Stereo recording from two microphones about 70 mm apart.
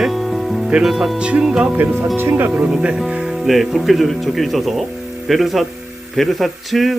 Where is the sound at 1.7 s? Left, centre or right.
Right.